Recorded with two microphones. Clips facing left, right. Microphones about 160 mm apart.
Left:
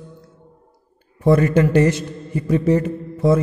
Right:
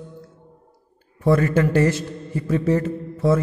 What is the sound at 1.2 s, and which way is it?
A man's voice, 20° left (ahead or behind).